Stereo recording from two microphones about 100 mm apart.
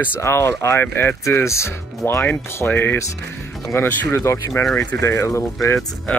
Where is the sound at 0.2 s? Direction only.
25° left (ahead or behind).